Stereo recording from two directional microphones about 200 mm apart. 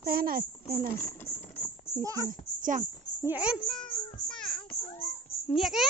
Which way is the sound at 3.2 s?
5° right (ahead or behind).